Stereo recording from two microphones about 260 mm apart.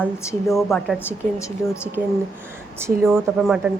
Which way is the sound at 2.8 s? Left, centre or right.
Centre.